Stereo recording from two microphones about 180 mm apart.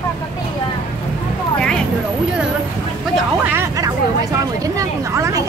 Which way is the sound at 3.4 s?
15° right (ahead or behind).